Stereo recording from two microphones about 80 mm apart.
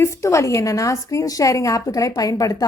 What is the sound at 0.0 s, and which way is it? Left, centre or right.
A woman's voice, left.